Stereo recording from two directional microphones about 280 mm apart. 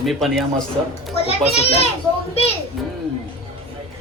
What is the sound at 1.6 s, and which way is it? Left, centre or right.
Speech, left.